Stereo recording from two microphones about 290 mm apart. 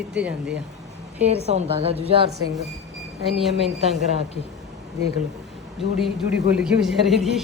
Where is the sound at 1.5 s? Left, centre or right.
Right.